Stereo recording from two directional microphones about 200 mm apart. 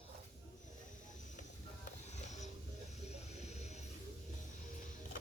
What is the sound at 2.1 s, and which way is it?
Music, 35° left (ahead or behind).